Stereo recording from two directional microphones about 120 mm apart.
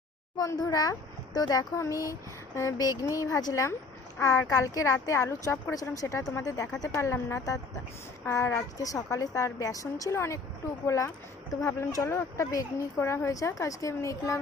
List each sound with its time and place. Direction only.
0.3 s speech: 30° left (ahead or behind)